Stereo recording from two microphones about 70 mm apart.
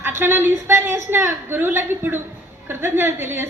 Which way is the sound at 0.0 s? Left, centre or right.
Right.